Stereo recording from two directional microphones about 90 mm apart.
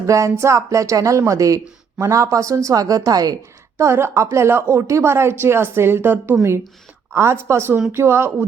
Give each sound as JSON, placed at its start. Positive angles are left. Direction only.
{"t": 0.0, "sound": "speech", "side_deg": -35}
{"t": 3.8, "sound": "a woman's voice", "side_deg": -30}